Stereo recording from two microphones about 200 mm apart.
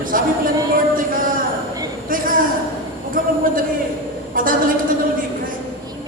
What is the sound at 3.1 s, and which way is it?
A man's voice, 45° right (ahead or behind).